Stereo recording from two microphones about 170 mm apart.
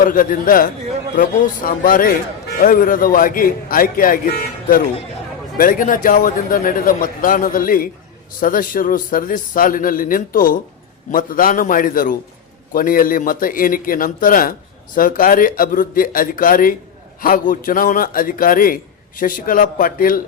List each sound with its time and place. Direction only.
0.0 s a man's voice: 55° left (ahead or behind)
5.5 s a man's voice: 55° left (ahead or behind)